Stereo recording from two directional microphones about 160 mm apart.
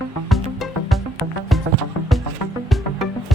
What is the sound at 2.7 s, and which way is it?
Music, centre (ahead or behind).